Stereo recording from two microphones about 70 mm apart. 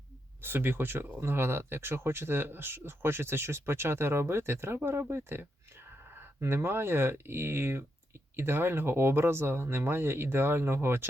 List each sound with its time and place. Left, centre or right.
0.4 s speech: right